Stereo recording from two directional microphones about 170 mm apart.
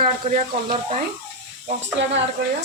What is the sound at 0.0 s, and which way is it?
Speech, 40° right (ahead or behind).